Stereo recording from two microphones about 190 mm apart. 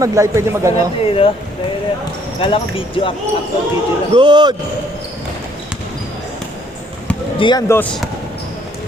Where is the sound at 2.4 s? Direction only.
30° left (ahead or behind).